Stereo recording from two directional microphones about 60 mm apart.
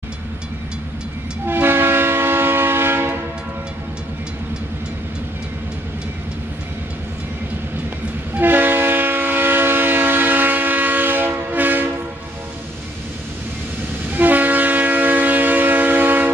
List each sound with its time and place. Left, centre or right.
1.4 s train: right
8.4 s train: right
14.1 s train: right